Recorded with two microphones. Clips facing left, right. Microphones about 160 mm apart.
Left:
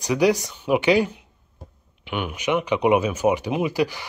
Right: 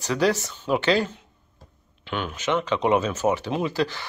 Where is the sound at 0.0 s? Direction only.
15° left (ahead or behind).